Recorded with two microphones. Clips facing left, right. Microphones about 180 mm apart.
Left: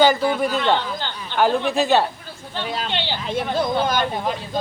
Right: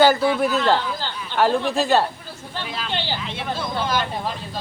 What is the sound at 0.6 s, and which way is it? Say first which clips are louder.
Speech: even; 5° right (ahead or behind).